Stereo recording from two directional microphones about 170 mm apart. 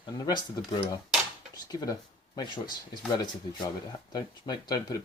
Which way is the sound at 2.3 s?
25° left (ahead or behind).